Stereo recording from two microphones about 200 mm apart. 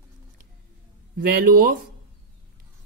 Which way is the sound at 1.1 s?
45° right (ahead or behind).